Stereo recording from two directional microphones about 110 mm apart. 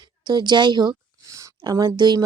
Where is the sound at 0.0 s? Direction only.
40° right (ahead or behind).